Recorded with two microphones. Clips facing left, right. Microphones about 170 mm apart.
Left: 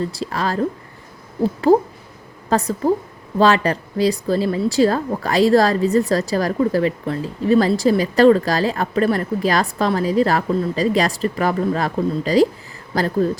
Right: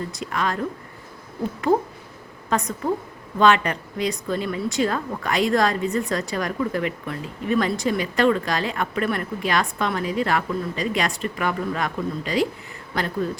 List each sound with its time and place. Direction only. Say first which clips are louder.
0.1 s a woman's voice: left 3 dB; 35° left (ahead or behind)